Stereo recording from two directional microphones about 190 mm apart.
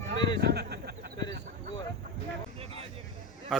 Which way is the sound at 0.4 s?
60° right (ahead or behind).